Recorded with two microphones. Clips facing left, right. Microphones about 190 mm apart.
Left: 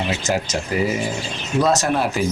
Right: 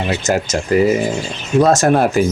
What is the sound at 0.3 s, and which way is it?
Speech, 45° right (ahead or behind).